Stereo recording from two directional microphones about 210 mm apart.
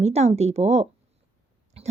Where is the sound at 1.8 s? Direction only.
30° right (ahead or behind).